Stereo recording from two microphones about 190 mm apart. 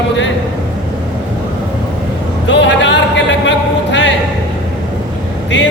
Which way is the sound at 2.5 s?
70° left (ahead or behind).